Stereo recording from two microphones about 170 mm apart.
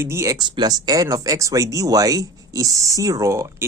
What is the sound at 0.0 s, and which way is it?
A man's voice, 15° right (ahead or behind).